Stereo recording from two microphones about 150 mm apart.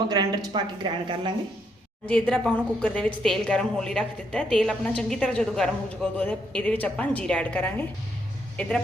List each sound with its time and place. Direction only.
0.1 s speech: 30° right (ahead or behind)
2.0 s a woman's voice: 5° left (ahead or behind)